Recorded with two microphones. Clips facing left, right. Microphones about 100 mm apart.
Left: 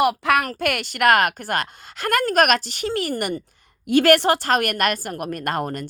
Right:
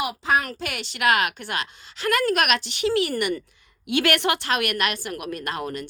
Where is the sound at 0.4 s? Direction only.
55° left (ahead or behind).